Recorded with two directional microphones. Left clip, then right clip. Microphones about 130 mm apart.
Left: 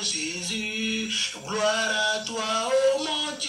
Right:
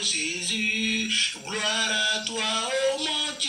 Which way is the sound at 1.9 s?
40° left (ahead or behind).